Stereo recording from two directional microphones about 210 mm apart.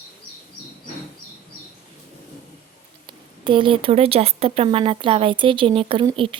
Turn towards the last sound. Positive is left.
turn(degrees=-25)  # may be behind; listen again after turning